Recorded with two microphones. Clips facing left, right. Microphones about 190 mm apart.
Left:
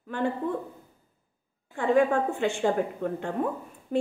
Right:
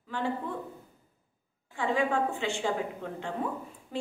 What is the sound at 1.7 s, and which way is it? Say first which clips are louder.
A woman's voice: left 6 dB; 50° left (ahead or behind).